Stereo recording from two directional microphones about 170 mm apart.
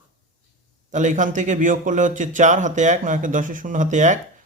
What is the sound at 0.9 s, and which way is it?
Speech, 45° right (ahead or behind).